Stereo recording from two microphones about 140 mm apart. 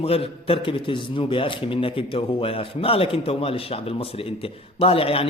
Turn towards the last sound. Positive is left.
turn(degrees=45)  # may be behind; listen again after turning